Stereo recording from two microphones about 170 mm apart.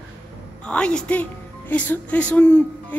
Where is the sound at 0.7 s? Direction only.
5° left (ahead or behind).